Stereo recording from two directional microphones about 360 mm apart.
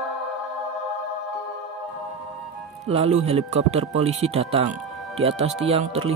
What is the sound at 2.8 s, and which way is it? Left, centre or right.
Speech, centre.